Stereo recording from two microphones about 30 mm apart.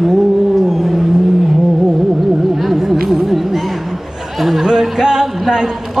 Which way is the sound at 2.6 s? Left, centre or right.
Centre.